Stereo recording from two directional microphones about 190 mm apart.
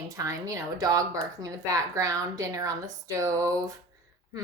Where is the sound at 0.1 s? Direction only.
15° right (ahead or behind).